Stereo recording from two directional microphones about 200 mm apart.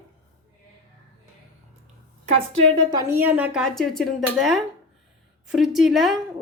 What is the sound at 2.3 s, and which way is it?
A woman's voice, 30° right (ahead or behind).